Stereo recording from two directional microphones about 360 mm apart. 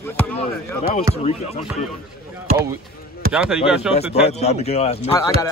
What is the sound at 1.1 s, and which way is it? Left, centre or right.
Speech, centre.